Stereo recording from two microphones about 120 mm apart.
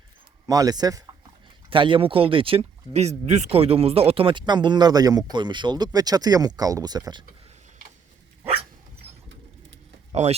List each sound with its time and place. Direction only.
0.4 s speech: 30° right (ahead or behind)
1.7 s speech: 45° right (ahead or behind)
2.9 s speech: 65° right (ahead or behind); by 7.3 s 35° right (ahead or behind)
8.4 s dog: 55° right (ahead or behind)
10.1 s speech: 60° right (ahead or behind)